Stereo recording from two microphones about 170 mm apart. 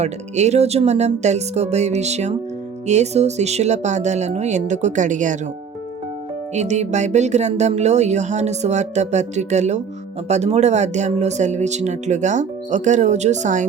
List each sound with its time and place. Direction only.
0.0 s speech: 40° right (ahead or behind)
6.5 s speech: 40° right (ahead or behind)